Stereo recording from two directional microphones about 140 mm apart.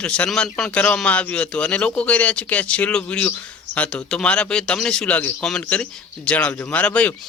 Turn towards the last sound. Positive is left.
turn(degrees=10)  # may be behind; listen again after turning